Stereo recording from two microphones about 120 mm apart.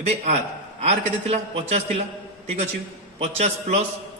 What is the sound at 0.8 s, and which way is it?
Speech, 55° right (ahead or behind).